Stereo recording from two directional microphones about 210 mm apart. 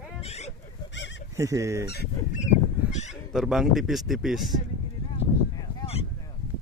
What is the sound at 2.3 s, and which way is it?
Honk, 35° left (ahead or behind).